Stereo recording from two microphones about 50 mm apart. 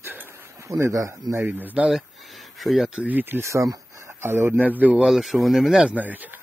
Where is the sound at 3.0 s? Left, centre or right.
Right.